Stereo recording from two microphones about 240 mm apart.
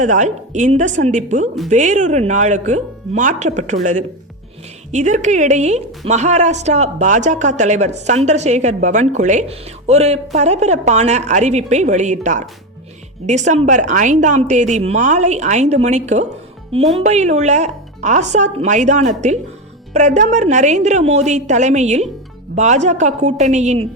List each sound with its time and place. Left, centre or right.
0.0 s speech: right